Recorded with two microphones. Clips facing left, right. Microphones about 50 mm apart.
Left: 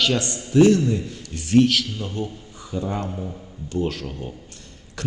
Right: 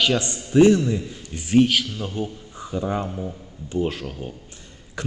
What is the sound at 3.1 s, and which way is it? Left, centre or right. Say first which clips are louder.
Speech: right 1 dB; centre.